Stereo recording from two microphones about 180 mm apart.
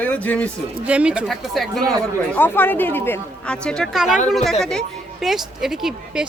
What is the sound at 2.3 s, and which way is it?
A woman's voice, 10° left (ahead or behind).